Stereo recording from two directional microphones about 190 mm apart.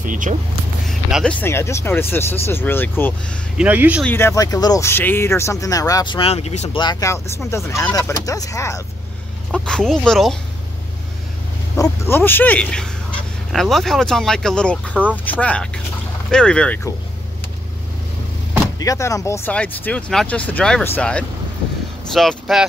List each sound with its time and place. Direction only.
0.0 s speech: 45° right (ahead or behind)
0.8 s speech: 5° left (ahead or behind)
3.5 s speech: 10° right (ahead or behind)
4.0 s speech: 10° left (ahead or behind); by 6.8 s 35° left (ahead or behind)
6.8 s speech: 20° left (ahead or behind)
9.5 s speech: 5° left (ahead or behind)
11.7 s speech: 15° left (ahead or behind)
18.8 s speech: 15° left (ahead or behind); by 22.7 s centre (ahead or behind)